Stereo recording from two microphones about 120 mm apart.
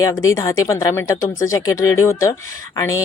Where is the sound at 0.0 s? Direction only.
25° left (ahead or behind).